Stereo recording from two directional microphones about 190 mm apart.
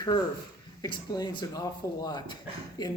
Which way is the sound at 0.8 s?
20° left (ahead or behind).